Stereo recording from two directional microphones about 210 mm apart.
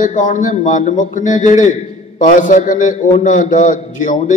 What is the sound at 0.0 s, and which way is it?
A man's voice, 35° left (ahead or behind).